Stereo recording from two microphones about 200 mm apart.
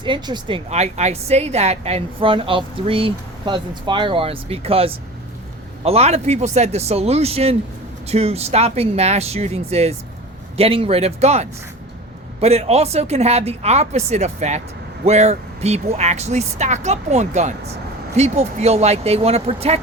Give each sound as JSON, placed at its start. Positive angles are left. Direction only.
{"t": 0.0, "sound": "a woman's voice", "side_deg": -25}